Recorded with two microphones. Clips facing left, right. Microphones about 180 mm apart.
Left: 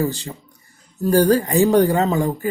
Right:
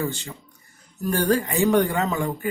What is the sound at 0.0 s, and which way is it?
Speech, 35° left (ahead or behind).